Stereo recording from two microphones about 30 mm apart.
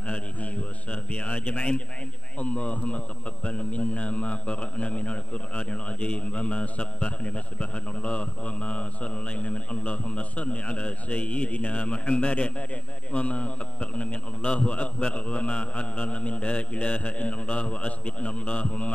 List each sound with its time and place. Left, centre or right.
0.0 s a man's voice: left